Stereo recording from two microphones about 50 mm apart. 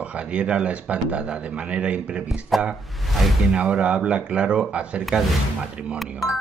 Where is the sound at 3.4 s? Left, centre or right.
Centre.